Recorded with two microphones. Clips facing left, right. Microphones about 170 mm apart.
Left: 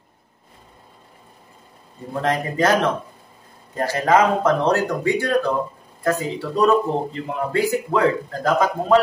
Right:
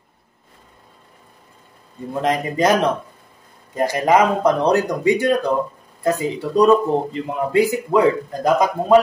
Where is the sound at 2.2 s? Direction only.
15° right (ahead or behind).